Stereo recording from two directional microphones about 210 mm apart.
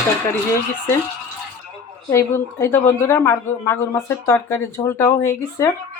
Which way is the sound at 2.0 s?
15° left (ahead or behind).